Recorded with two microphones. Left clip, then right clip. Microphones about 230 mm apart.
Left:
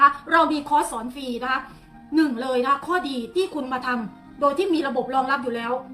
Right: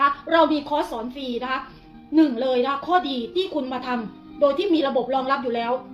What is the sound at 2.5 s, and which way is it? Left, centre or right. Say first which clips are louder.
Speech: left 1 dB; centre.